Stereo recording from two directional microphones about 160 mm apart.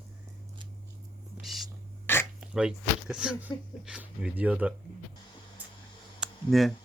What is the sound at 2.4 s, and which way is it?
Speech, 5° right (ahead or behind).